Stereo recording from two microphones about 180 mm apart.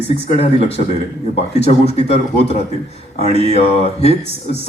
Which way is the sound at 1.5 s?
35° left (ahead or behind).